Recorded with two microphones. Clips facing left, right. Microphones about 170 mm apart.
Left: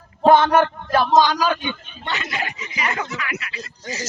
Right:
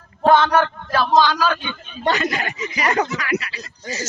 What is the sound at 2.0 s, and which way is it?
Speech, 45° right (ahead or behind).